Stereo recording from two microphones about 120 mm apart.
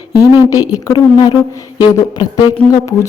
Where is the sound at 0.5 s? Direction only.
30° left (ahead or behind).